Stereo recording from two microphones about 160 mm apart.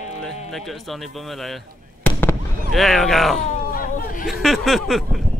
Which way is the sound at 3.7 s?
60° left (ahead or behind).